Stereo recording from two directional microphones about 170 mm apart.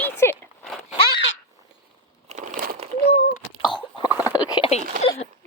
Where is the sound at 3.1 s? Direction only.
35° left (ahead or behind).